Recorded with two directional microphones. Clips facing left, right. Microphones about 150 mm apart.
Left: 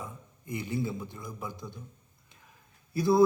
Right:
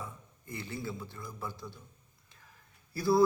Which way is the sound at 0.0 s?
15° left (ahead or behind).